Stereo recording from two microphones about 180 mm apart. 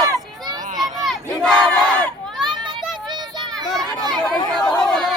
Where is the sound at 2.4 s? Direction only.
25° right (ahead or behind).